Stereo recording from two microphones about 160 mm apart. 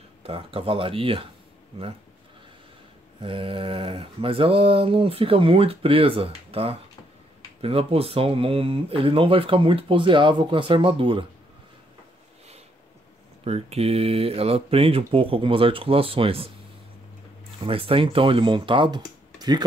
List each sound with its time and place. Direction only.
0.2 s mantra: 35° right (ahead or behind)
3.2 s mantra: 35° right (ahead or behind)
13.4 s mantra: 40° right (ahead or behind)
17.6 s mantra: 35° right (ahead or behind)